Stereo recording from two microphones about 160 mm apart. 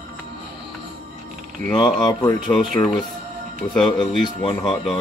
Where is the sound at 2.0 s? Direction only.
20° left (ahead or behind).